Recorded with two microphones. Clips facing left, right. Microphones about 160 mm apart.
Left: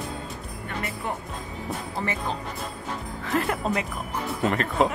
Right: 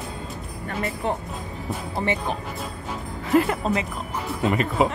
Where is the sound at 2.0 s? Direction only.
20° right (ahead or behind).